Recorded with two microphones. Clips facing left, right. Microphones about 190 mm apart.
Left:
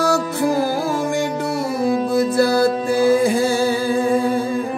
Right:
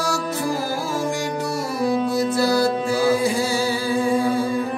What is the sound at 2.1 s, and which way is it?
Music, 55° left (ahead or behind).